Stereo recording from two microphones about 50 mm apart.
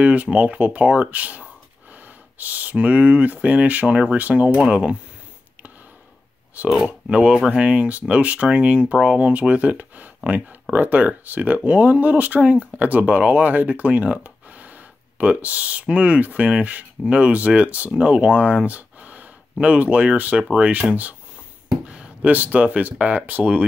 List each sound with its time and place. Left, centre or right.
0.0 s speech: right
4.6 s speech: right
6.6 s speech: right
6.9 s speech: right
21.8 s a sound: right
22.3 s speech: right